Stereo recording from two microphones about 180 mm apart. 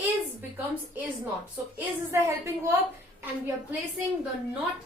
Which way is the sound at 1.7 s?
15° right (ahead or behind).